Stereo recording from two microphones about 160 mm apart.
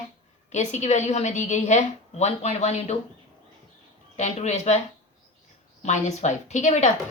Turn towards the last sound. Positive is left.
turn(degrees=45)  # may be behind; listen again after turning